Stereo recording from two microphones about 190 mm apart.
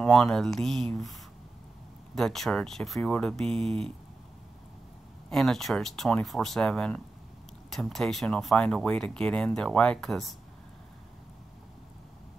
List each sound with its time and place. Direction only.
0.0 s speech: centre (ahead or behind)
2.1 s speech: centre (ahead or behind)
5.3 s speech: centre (ahead or behind)